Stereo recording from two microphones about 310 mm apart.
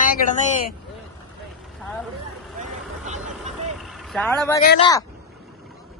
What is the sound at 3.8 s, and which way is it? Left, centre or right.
Vehicle, centre.